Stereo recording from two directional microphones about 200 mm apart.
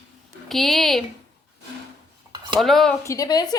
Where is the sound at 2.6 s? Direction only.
Centre (ahead or behind).